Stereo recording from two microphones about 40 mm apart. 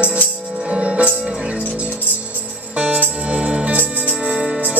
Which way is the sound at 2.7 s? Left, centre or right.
Right.